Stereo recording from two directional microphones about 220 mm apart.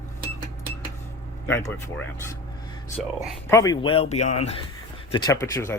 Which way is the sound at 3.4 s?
15° left (ahead or behind).